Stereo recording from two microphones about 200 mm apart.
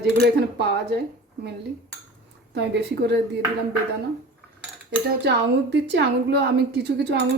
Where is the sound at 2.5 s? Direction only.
60° right (ahead or behind).